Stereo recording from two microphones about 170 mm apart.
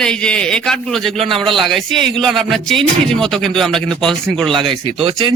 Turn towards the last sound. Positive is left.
turn(degrees=-30)  # may be behind; listen again after turning